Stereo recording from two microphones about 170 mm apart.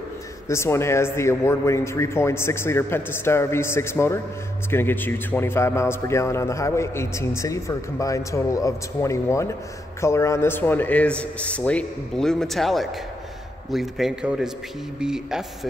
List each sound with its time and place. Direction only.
0.5 s a man's voice: 15° left (ahead or behind); by 15.4 s 5° right (ahead or behind)